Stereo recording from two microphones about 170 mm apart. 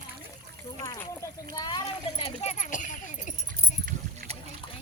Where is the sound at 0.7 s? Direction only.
20° left (ahead or behind).